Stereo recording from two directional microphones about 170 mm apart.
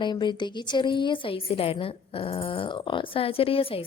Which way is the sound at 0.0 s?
25° left (ahead or behind).